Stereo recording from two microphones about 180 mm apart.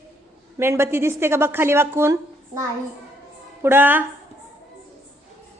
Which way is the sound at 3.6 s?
10° right (ahead or behind).